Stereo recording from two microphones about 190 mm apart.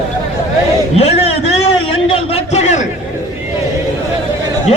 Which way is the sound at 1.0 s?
35° left (ahead or behind).